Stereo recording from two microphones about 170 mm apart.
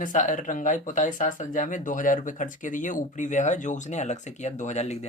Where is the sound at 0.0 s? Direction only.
50° left (ahead or behind).